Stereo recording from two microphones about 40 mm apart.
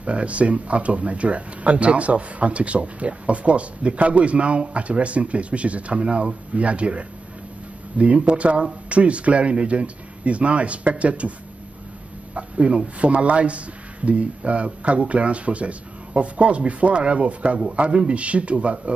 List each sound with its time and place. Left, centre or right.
0.0 s speech: right
12.4 s speech: right